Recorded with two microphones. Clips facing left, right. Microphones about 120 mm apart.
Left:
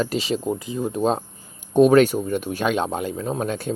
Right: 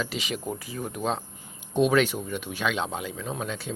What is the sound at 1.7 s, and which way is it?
Speech, 45° left (ahead or behind).